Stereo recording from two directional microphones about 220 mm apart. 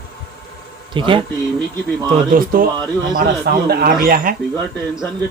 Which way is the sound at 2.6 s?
40° right (ahead or behind).